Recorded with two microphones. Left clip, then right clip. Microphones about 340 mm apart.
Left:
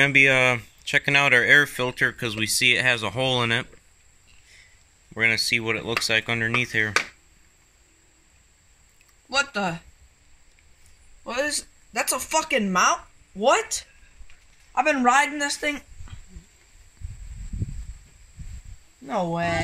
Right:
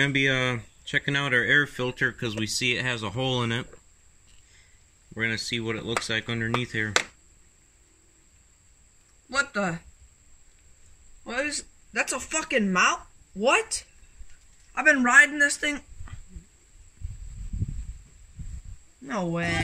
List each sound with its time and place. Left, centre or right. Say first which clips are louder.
0.0 s speech: left 7 dB; centre
5.1 s speech: left 7 dB; centre
9.3 s speech: left 2 dB; centre
11.2 s speech: left 3 dB; centre
14.7 s speech: even; centre
19.0 s speech: left 4 dB; centre